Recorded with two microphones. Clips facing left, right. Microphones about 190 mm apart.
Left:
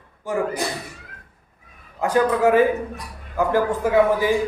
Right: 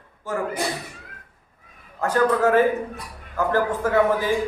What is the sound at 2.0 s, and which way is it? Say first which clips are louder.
A man's voice: left 1 dB; 15° left (ahead or behind).